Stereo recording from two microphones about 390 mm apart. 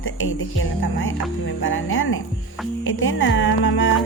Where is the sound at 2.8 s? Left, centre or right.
Left.